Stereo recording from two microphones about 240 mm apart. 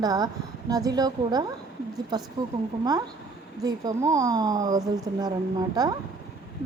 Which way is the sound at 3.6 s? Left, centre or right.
Centre.